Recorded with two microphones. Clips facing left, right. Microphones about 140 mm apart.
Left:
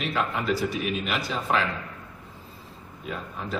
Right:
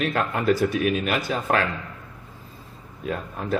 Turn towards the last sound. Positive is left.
turn(degrees=-55)  # may be behind; listen again after turning